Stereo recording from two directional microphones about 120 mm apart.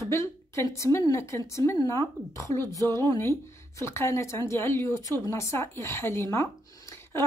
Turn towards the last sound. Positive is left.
turn(degrees=20)  # may be behind; listen again after turning